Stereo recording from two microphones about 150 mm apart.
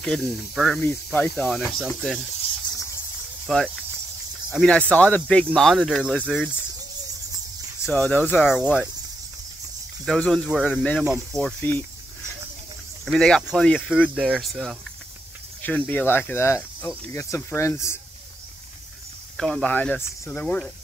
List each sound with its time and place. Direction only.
0.0 s speech: 5° left (ahead or behind)
0.7 s speech: 15° left (ahead or behind)
3.4 s speech: centre (ahead or behind)
7.8 s speech: 10° left (ahead or behind)
10.0 s speech: 5° left (ahead or behind)
13.0 s speech: 5° left (ahead or behind)
15.6 s speech: 10° left (ahead or behind)
19.3 s speech: centre (ahead or behind)